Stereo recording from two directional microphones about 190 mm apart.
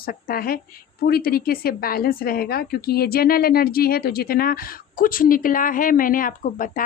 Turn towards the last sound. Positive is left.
turn(degrees=45)  # may be behind; listen again after turning